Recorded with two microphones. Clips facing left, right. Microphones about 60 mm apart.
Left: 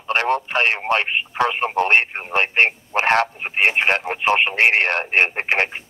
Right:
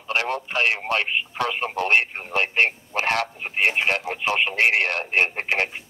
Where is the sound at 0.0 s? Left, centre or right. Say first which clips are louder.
Left 5 dB; left.